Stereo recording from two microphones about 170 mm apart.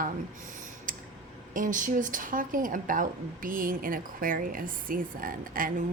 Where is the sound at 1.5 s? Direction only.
50° right (ahead or behind).